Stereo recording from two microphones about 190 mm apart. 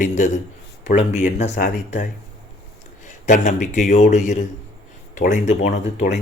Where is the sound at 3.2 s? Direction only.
40° left (ahead or behind).